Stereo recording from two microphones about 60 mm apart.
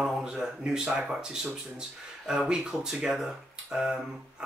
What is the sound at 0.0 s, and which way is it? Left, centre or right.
Speech, centre.